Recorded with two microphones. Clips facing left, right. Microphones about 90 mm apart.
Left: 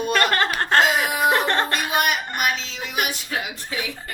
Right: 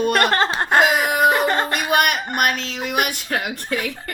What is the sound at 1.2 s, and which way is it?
Music, centre (ahead or behind).